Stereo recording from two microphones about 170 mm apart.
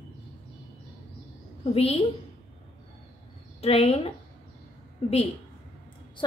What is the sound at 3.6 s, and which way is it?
A woman's voice, 35° left (ahead or behind).